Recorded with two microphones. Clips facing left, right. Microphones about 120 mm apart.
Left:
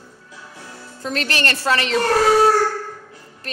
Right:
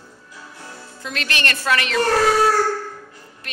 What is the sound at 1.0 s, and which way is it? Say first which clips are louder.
Speech: left 3 dB; 35° left (ahead or behind).